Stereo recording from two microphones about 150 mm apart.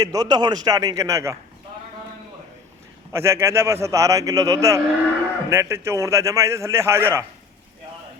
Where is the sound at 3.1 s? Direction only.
15° right (ahead or behind).